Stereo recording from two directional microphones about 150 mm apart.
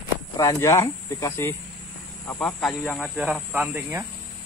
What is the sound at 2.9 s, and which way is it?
Speech, 5° right (ahead or behind).